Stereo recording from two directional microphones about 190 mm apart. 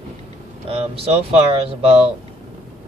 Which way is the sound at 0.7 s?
30° right (ahead or behind).